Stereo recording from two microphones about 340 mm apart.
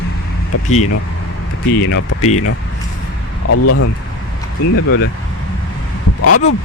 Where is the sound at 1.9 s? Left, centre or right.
Left.